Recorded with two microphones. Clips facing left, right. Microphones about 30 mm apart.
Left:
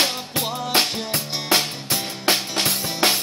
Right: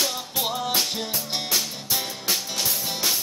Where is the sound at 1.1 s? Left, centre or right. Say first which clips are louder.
Left 5 dB; left.